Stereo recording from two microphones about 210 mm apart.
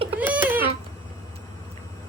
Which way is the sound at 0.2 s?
10° right (ahead or behind).